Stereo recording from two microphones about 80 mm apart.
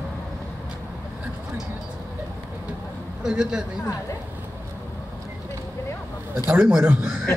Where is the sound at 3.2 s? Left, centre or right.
Centre.